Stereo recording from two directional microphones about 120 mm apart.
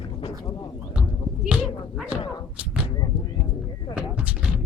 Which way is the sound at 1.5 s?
5° right (ahead or behind).